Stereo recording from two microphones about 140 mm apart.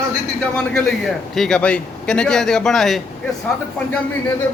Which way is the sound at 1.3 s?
5° left (ahead or behind).